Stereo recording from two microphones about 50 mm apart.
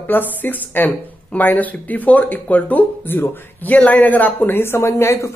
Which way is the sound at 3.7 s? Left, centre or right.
Left.